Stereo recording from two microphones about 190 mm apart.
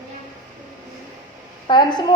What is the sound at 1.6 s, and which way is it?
Speech, 25° left (ahead or behind).